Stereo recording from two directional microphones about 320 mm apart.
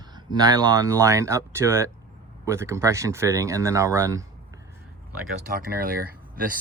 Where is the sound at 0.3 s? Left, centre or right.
Centre.